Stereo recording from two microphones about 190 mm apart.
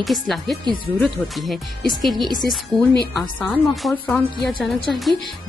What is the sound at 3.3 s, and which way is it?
A woman's voice, centre (ahead or behind).